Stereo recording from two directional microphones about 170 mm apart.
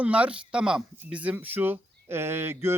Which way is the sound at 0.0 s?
5° right (ahead or behind).